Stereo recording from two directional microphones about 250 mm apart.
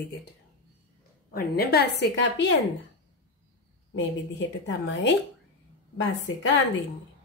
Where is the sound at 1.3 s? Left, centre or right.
Left.